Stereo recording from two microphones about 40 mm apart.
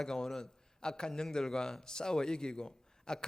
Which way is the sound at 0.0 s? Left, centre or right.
Centre.